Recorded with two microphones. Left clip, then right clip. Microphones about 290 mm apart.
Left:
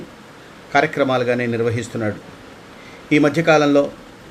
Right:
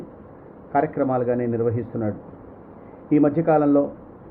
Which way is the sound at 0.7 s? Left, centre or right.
Left.